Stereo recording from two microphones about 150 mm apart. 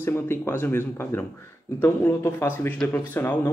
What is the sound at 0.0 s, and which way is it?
Speech, 15° left (ahead or behind).